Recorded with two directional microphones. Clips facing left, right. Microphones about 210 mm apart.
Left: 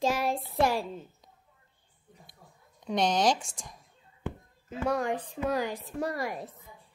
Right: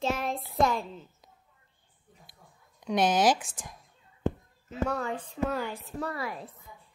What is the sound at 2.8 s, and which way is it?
Speech, 5° right (ahead or behind).